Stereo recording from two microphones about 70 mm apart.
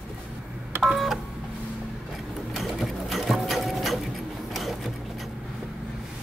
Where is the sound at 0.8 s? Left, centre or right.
Centre.